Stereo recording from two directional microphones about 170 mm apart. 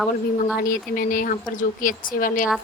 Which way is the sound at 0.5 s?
55° left (ahead or behind).